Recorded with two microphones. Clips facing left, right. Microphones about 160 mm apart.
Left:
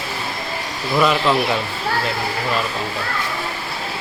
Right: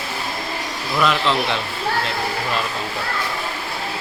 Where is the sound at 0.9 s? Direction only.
10° left (ahead or behind).